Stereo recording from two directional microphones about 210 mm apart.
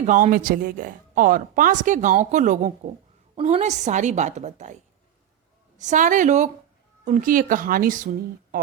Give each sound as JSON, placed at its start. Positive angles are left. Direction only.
{"t": 0.0, "sound": "speech", "side_deg": -40}
{"t": 5.8, "sound": "speech", "side_deg": -35}